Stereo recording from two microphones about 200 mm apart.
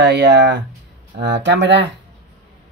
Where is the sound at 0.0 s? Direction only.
60° right (ahead or behind).